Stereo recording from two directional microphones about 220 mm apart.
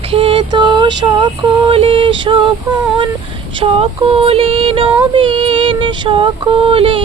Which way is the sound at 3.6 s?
25° right (ahead or behind).